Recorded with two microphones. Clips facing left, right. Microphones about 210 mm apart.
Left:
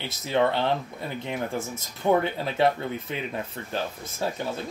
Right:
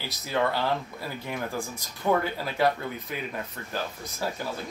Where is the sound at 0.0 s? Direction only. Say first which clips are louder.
Left 4 dB; 25° left (ahead or behind).